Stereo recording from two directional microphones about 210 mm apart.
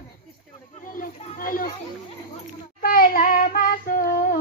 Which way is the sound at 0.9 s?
40° left (ahead or behind).